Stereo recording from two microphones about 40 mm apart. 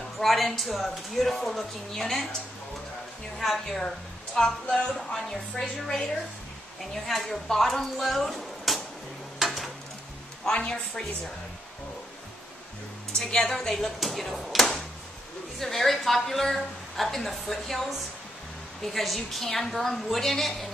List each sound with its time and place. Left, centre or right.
0.2 s a woman's voice: centre
3.3 s a woman's voice: centre
3.6 s speech: centre
4.8 s a woman's voice: centre
9.4 s a sound: centre
10.5 s a woman's voice: left
13.5 s a woman's voice: centre